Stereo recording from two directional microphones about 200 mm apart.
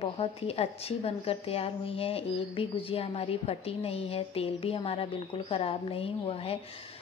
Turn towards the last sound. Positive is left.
turn(degrees=30)  # may be behind; listen again after turning